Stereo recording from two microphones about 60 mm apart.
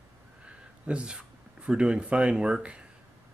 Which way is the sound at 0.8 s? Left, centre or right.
Centre.